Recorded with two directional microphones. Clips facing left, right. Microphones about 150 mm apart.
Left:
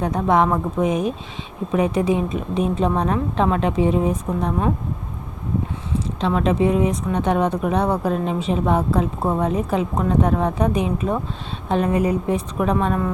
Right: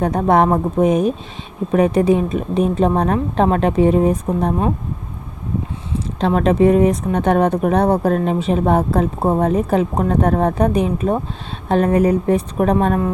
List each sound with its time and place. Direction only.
0.0 s speech: 50° right (ahead or behind)
6.1 s speech: 50° right (ahead or behind)